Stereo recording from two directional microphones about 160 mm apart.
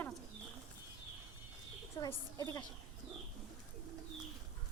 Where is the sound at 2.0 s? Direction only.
35° left (ahead or behind).